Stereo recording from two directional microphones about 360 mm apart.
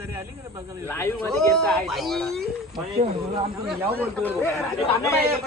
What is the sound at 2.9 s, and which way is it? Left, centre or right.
Speech, centre.